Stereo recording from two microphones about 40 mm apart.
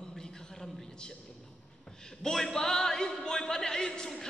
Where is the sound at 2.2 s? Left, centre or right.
Centre.